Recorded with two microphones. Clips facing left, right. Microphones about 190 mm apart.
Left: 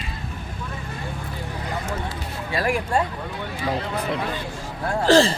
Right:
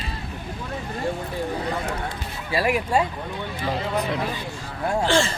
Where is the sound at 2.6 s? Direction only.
5° right (ahead or behind).